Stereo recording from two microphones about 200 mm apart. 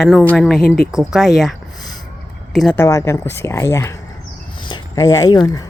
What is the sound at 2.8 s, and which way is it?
Speech, 15° left (ahead or behind).